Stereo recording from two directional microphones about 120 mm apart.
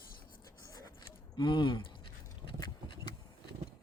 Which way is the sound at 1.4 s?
40° left (ahead or behind).